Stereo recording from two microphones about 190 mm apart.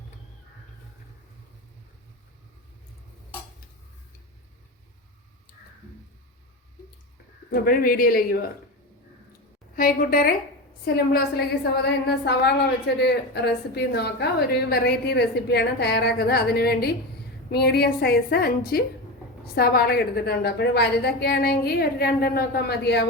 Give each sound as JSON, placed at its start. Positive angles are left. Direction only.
{"t": 7.5, "sound": "speech", "side_deg": 50}
{"t": 9.7, "sound": "a woman's voice", "side_deg": 50}